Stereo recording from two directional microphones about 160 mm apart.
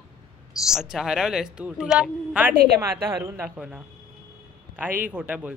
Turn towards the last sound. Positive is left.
turn(degrees=-10)  # may be behind; listen again after turning